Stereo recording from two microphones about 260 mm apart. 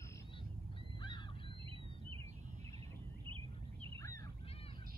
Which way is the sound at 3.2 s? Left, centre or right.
Centre.